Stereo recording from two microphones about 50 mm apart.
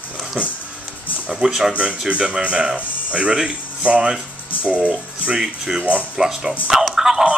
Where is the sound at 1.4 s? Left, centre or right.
Centre.